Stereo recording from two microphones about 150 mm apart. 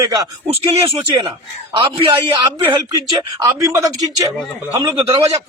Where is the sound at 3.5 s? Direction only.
20° right (ahead or behind).